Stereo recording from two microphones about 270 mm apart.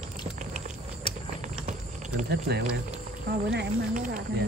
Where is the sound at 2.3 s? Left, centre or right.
Right.